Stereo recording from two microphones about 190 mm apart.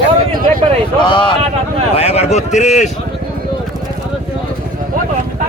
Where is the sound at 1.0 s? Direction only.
25° left (ahead or behind).